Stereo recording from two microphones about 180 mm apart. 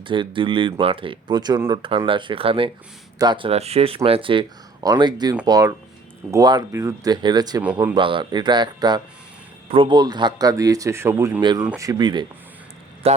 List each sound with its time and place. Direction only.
0.0 s a man's voice: 30° right (ahead or behind)